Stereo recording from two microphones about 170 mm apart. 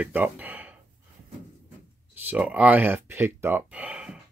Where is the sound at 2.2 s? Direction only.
10° right (ahead or behind).